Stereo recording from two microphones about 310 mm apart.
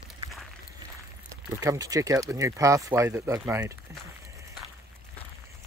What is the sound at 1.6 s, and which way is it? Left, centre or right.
Speech, centre.